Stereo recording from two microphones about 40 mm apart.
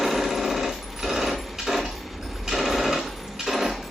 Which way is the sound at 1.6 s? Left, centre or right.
Centre.